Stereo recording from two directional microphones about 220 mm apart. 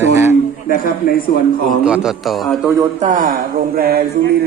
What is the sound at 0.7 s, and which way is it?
Speech, 40° left (ahead or behind).